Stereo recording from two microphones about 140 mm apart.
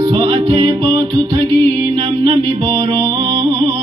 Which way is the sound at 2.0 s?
35° right (ahead or behind).